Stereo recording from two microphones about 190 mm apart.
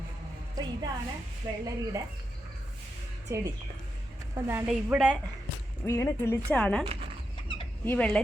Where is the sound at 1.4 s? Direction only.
15° right (ahead or behind).